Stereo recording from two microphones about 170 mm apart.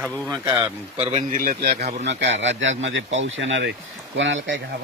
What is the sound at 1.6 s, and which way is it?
Speech, 70° right (ahead or behind).